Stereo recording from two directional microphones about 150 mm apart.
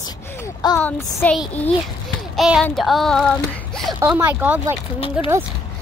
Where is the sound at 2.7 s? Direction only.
Centre (ahead or behind).